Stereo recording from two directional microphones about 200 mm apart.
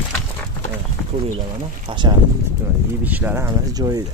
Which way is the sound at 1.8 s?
25° right (ahead or behind).